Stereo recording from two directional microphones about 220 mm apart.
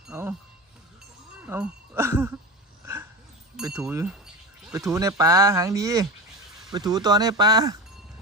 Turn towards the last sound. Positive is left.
turn(degrees=-15)  # may be behind; listen again after turning